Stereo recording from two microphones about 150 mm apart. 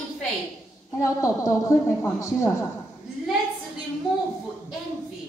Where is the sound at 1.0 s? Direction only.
20° left (ahead or behind).